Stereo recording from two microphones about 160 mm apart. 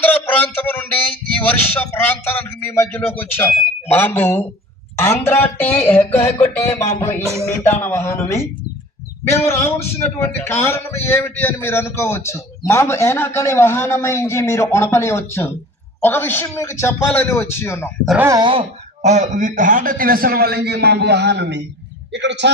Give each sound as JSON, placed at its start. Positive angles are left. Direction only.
{"t": 1.7, "sound": "a man's voice", "side_deg": 15}
{"t": 18.0, "sound": "speech", "side_deg": -10}
{"t": 18.3, "sound": "speech", "side_deg": -30}
{"t": 19.0, "sound": "a man's voice", "side_deg": -50}